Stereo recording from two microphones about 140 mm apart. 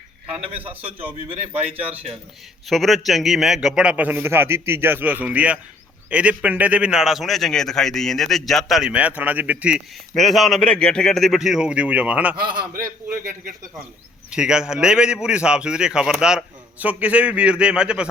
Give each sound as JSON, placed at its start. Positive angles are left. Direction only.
{"t": 0.3, "sound": "a man's voice", "side_deg": -45}
{"t": 2.6, "sound": "a man's voice", "side_deg": 0}
{"t": 14.3, "sound": "a man's voice", "side_deg": -5}